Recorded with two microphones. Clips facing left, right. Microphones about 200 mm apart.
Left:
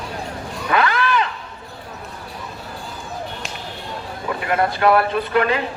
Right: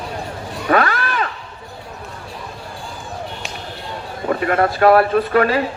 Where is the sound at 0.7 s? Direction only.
45° right (ahead or behind).